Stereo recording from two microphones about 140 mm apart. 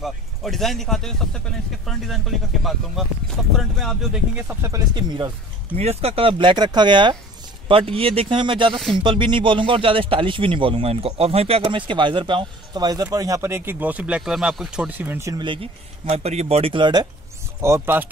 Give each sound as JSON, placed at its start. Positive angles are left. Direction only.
{"t": 0.0, "sound": "speech", "side_deg": 0}
{"t": 4.6, "sound": "speech", "side_deg": -30}
{"t": 5.8, "sound": "speech", "side_deg": -45}
{"t": 8.7, "sound": "speech", "side_deg": 0}
{"t": 9.0, "sound": "speech", "side_deg": -35}
{"t": 15.3, "sound": "speech", "side_deg": -35}
{"t": 17.6, "sound": "speech", "side_deg": -20}